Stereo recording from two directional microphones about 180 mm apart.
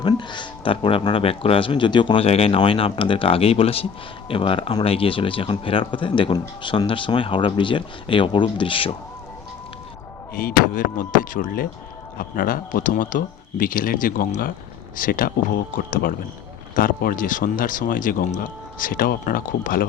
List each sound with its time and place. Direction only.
0.0 s speech: 25° left (ahead or behind)
10.3 s speech: 50° left (ahead or behind)